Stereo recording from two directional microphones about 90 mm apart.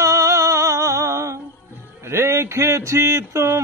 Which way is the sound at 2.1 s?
30° right (ahead or behind).